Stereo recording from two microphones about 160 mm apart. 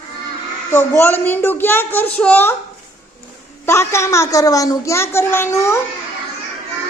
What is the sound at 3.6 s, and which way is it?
A woman's voice, 15° left (ahead or behind).